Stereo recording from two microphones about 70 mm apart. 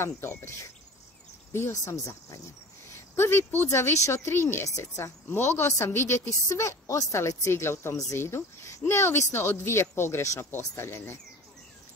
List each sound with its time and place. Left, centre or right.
0.0 s speech: left
1.9 s speech: left
3.2 s speech: left
6.5 s speech: left